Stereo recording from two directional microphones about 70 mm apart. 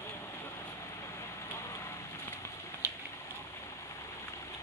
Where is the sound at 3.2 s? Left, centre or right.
Left.